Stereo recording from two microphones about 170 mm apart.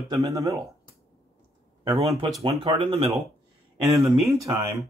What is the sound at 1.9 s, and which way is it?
Speech, 25° right (ahead or behind).